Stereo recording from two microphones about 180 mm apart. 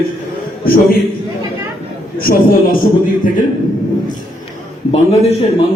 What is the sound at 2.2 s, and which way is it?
Speech, 55° left (ahead or behind).